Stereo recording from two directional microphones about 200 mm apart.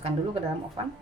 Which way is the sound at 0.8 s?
30° right (ahead or behind).